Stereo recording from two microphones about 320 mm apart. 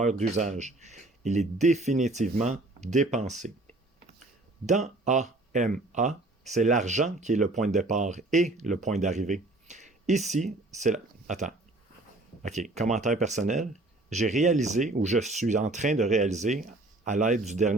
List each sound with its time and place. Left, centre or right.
0.0 s speech: right
4.6 s speech: right